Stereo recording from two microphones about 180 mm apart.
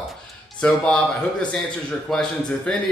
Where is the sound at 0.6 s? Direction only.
5° left (ahead or behind).